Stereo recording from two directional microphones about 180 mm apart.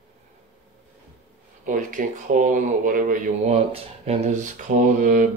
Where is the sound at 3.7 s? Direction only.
35° right (ahead or behind).